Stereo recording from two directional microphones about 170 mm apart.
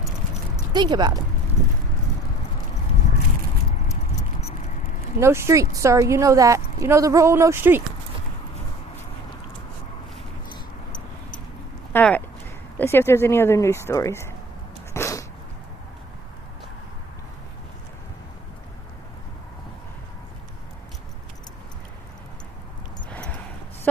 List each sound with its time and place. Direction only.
0.7 s speech: 25° right (ahead or behind)
5.2 s a woman's voice: 15° right (ahead or behind)
11.9 s speech: 10° left (ahead or behind)
14.9 s sneeze: 15° left (ahead or behind)
23.1 s a sound: 10° left (ahead or behind)